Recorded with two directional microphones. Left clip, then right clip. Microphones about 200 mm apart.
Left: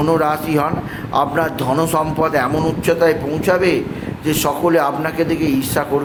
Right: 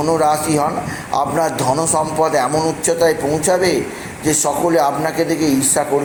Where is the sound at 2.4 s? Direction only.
35° left (ahead or behind).